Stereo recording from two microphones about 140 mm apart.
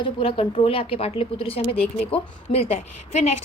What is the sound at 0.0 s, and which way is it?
Speech, 40° left (ahead or behind).